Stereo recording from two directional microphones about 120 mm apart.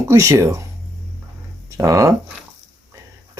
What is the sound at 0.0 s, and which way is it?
Speech, 25° right (ahead or behind).